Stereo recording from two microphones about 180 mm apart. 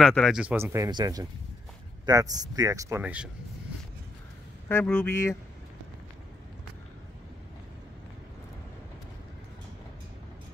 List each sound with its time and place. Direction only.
0.0 s speech: centre (ahead or behind); by 3.0 s 20° right (ahead or behind)
3.0 s speech: 5° right (ahead or behind)
4.6 s a man's voice: 10° left (ahead or behind)